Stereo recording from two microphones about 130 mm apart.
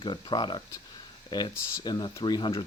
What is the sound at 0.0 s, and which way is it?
Speech, 35° left (ahead or behind).